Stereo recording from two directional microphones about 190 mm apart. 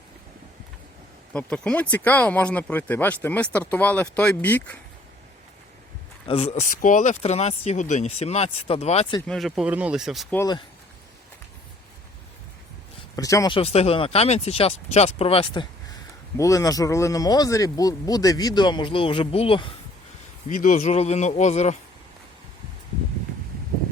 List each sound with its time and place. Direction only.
1.3 s speech: 5° left (ahead or behind)
6.2 s speech: 30° left (ahead or behind)
9.2 s speech: centre (ahead or behind)
10.3 s speech: 20° left (ahead or behind)
13.1 s speech: 20° left (ahead or behind)
13.6 s speech: 30° left (ahead or behind)
16.4 s speech: 15° left (ahead or behind)
20.5 s speech: 45° left (ahead or behind)